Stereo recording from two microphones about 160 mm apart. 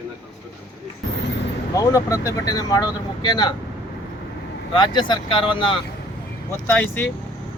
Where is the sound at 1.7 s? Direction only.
20° left (ahead or behind).